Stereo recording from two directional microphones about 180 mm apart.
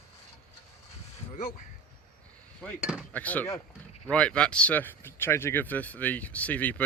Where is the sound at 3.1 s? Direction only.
10° left (ahead or behind).